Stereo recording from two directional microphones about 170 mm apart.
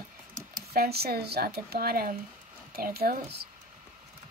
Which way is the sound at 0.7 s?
65° right (ahead or behind).